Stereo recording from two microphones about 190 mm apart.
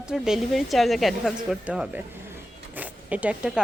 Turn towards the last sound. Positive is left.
turn(degrees=-5)  # may be behind; listen again after turning